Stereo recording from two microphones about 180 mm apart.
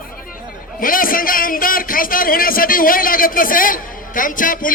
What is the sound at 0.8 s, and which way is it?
A man's voice, 50° left (ahead or behind).